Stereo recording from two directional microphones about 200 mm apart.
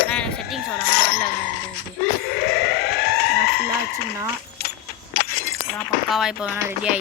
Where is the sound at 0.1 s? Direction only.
5° left (ahead or behind).